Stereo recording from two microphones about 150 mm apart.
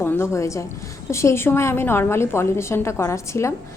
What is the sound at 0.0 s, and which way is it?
A woman's voice, 15° left (ahead or behind).